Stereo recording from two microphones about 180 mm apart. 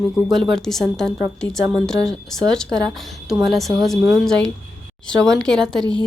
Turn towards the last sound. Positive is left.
turn(degrees=-25)  # may be behind; listen again after turning